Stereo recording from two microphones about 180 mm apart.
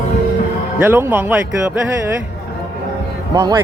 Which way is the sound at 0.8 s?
15° right (ahead or behind).